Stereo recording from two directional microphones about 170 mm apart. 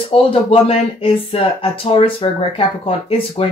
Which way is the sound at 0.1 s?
35° left (ahead or behind).